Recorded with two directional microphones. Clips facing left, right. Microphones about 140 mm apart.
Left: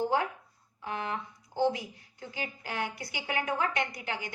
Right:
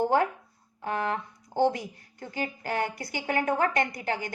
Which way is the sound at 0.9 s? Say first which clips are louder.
Right 5 dB; 50° right (ahead or behind).